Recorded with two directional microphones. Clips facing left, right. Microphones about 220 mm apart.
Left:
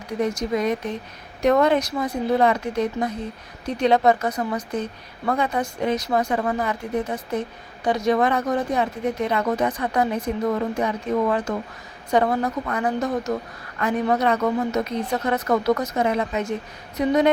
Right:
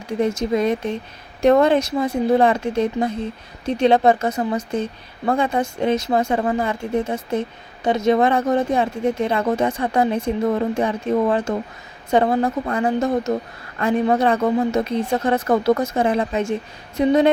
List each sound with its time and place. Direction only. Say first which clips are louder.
0.2 s speech: right 3 dB; 25° right (ahead or behind)